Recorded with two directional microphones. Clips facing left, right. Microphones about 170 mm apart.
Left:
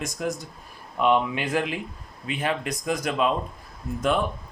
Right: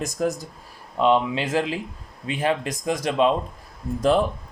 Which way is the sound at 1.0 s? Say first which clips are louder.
Right 2 dB; 25° right (ahead or behind).